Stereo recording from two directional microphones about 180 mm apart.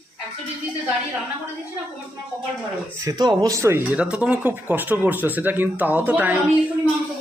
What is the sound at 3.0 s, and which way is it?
Speech, 20° right (ahead or behind).